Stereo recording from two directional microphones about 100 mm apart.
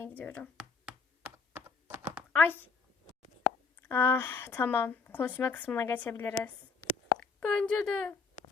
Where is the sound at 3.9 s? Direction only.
25° left (ahead or behind).